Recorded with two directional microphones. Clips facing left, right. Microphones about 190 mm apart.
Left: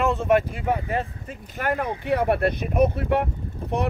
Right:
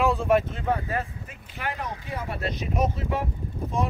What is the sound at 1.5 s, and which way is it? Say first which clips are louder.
Speech: left 7 dB; 50° left (ahead or behind).